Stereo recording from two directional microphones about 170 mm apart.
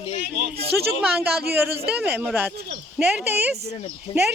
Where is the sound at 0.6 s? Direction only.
70° right (ahead or behind).